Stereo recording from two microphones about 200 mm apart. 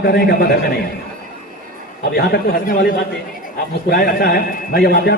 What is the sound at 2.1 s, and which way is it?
Speech, 50° left (ahead or behind).